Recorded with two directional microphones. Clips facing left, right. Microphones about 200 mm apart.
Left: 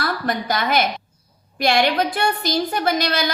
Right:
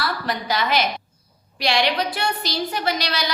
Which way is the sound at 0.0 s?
50° left (ahead or behind).